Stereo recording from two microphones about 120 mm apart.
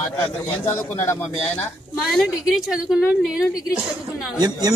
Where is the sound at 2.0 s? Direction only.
Centre (ahead or behind).